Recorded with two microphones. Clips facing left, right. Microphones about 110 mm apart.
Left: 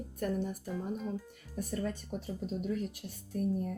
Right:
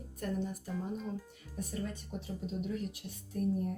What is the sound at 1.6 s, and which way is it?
Speech, 55° left (ahead or behind).